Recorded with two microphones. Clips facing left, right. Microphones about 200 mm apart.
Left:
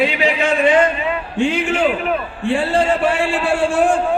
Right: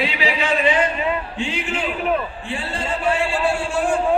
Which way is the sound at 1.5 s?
85° left.